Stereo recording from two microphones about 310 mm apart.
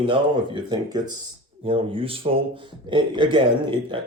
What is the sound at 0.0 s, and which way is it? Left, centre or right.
Speech, centre.